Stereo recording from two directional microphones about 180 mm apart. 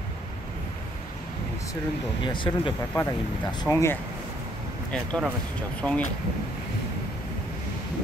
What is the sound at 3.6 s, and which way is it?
Speech, 15° left (ahead or behind).